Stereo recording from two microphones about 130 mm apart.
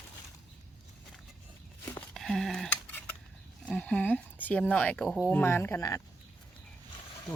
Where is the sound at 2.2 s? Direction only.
Centre (ahead or behind).